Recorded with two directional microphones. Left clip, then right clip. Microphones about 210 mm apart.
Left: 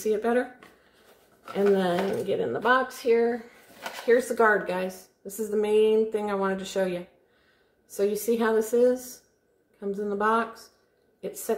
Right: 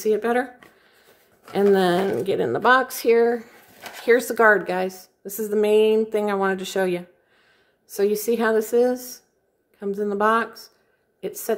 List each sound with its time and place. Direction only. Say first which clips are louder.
0.0 s a woman's voice: right 4 dB; 40° right (ahead or behind)
1.5 s speech: right 5 dB; 50° right (ahead or behind)
4.1 s a woman's voice: right 5 dB; 45° right (ahead or behind)